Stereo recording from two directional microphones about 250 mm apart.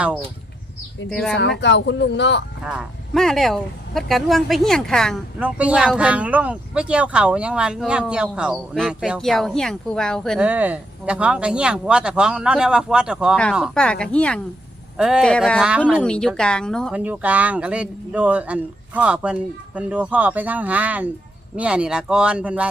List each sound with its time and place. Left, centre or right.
1.1 s speech: centre
1.4 s speech: left
2.6 s speech: centre